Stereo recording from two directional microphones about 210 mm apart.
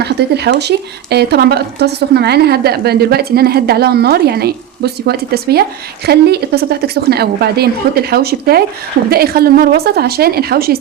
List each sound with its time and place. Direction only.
0.0 s speech: 50° right (ahead or behind)